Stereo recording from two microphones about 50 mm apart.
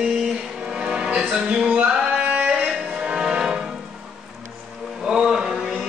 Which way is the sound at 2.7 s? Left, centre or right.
Centre.